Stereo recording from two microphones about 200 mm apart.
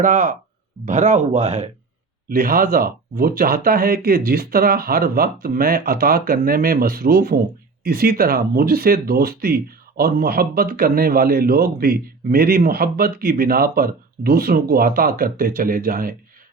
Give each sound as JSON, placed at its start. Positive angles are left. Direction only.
{"t": 0.0, "sound": "speech", "side_deg": -40}
{"t": 2.3, "sound": "speech", "side_deg": -45}